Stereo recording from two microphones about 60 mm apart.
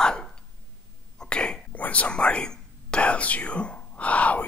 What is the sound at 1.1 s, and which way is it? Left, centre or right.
Cough, centre.